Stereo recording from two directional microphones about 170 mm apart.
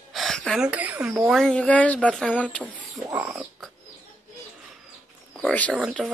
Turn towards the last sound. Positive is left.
turn(degrees=-5)  # may be behind; listen again after turning